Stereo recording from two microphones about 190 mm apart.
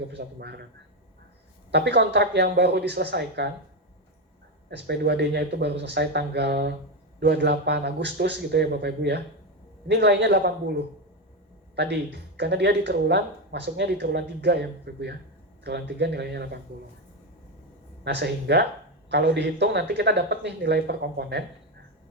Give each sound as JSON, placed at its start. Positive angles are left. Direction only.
{"t": 0.1, "sound": "speech", "side_deg": -60}
{"t": 1.7, "sound": "speech", "side_deg": -60}
{"t": 4.7, "sound": "speech", "side_deg": -60}
{"t": 11.8, "sound": "speech", "side_deg": -60}
{"t": 18.0, "sound": "speech", "side_deg": -60}